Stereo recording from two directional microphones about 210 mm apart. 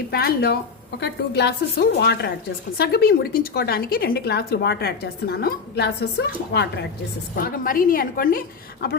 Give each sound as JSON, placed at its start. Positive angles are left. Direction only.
{"t": 0.1, "sound": "a woman's voice", "side_deg": 45}
{"t": 7.4, "sound": "a woman's voice", "side_deg": 40}